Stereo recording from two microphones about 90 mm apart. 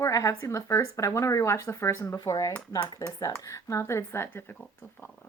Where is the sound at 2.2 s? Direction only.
40° left (ahead or behind); by 4.4 s 25° left (ahead or behind).